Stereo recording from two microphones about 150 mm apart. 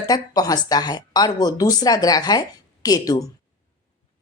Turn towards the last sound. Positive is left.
turn(degrees=25)  # may be behind; listen again after turning